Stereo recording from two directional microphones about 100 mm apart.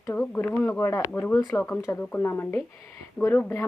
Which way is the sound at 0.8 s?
35° left (ahead or behind).